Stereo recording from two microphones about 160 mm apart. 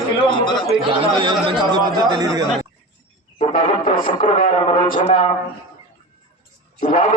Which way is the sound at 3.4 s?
55° left (ahead or behind).